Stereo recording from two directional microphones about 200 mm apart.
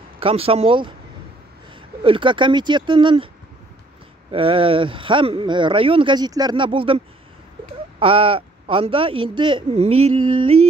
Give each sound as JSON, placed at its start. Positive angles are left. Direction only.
{"t": 0.2, "sound": "speech", "side_deg": -30}
{"t": 2.0, "sound": "speech", "side_deg": -25}
{"t": 4.3, "sound": "speech", "side_deg": -25}
{"t": 8.0, "sound": "speech", "side_deg": -25}